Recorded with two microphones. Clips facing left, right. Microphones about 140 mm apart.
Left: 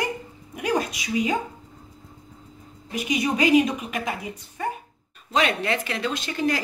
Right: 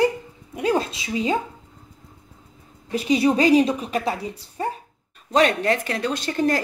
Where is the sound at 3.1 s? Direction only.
35° right (ahead or behind).